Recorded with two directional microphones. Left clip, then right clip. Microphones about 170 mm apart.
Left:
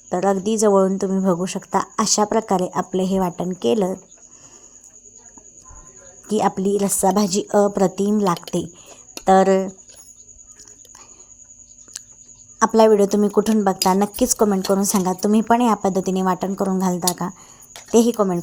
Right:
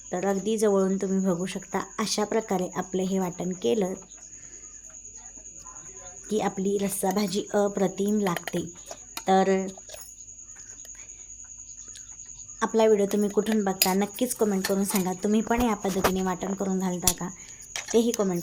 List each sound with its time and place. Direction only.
0.1 s a woman's voice: 30° left (ahead or behind)
6.2 s a woman's voice: 30° left (ahead or behind)
12.5 s speech: 40° left (ahead or behind)